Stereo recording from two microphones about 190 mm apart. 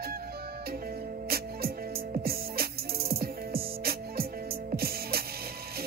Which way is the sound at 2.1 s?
55° right (ahead or behind).